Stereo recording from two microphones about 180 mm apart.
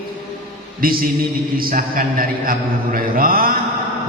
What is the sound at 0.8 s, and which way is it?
Mantra, 55° right (ahead or behind).